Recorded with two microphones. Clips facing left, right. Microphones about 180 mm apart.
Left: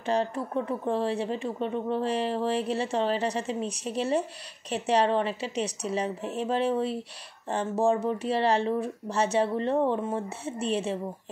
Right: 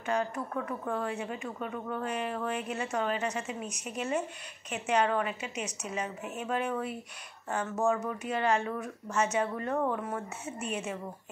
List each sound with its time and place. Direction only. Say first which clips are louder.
0.0 s a woman's voice: left 4 dB; 30° left (ahead or behind)